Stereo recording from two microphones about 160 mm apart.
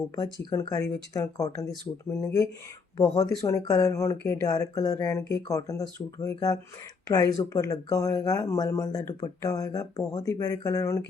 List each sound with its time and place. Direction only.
0.2 s speech: 25° left (ahead or behind)